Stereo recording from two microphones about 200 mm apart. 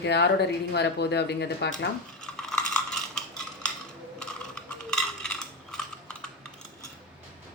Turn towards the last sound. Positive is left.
turn(degrees=5)  # may be behind; listen again after turning